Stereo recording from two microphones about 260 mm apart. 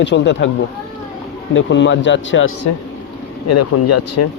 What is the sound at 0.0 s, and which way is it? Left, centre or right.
Speech, left.